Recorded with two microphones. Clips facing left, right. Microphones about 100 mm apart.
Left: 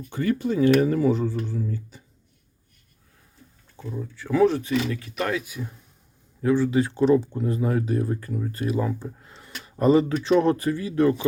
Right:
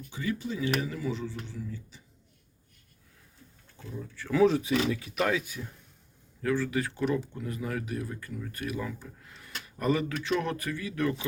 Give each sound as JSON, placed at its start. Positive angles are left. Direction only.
{"t": 0.1, "sound": "speech", "side_deg": 55}
{"t": 4.4, "sound": "speech", "side_deg": 0}
{"t": 6.4, "sound": "speech", "side_deg": 25}